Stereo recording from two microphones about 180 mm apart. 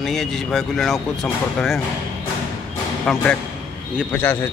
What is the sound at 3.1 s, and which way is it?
Speech, centre (ahead or behind).